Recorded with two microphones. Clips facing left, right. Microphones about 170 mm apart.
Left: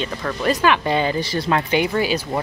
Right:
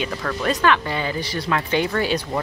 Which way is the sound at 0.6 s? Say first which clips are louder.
Left 3 dB; 15° left (ahead or behind).